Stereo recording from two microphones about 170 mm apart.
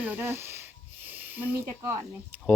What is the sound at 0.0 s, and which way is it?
Snake, 10° right (ahead or behind).